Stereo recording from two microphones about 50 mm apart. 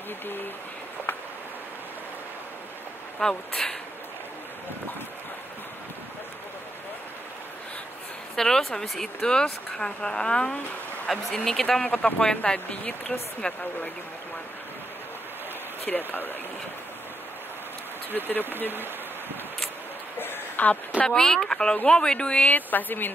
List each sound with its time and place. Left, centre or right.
3.2 s speech: centre
8.4 s speech: centre
11.1 s speech: centre
11.8 s speech: left
15.9 s speech: centre
18.1 s speech: left
20.2 s a sound: left
21.0 s speech: centre
22.5 s speech: left